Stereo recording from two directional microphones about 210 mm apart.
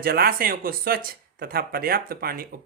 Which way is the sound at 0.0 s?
45° right (ahead or behind).